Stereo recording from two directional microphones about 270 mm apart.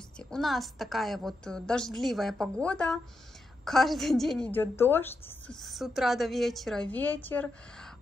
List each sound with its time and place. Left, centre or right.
0.2 s a woman's voice: centre